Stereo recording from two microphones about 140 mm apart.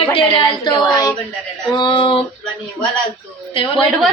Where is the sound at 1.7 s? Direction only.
35° left (ahead or behind).